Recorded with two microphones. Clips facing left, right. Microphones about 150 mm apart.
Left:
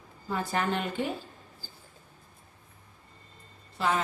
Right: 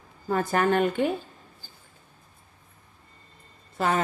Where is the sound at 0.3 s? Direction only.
50° right (ahead or behind).